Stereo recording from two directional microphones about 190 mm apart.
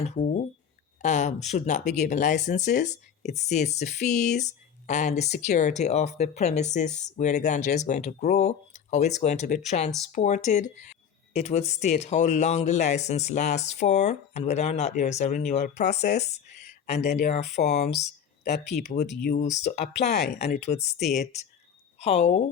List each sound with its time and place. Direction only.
0.0 s speech: 35° left (ahead or behind)
15.9 s speech: 60° left (ahead or behind)
16.6 s a sound: 40° left (ahead or behind)
17.2 s speech: 40° left (ahead or behind)
19.1 s speech: 60° left (ahead or behind)
19.4 s a woman's voice: 40° left (ahead or behind)